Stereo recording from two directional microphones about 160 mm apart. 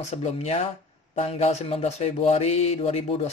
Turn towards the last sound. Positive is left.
turn(degrees=40)  # may be behind; listen again after turning